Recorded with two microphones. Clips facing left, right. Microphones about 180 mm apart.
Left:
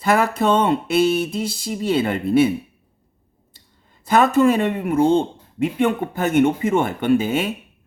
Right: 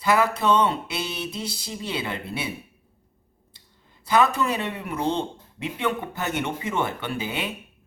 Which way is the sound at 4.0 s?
50° left (ahead or behind).